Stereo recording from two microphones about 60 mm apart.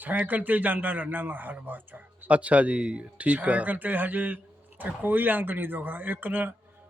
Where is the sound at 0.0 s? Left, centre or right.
Right.